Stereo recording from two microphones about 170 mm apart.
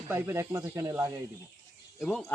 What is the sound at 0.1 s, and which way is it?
Speech, 15° right (ahead or behind).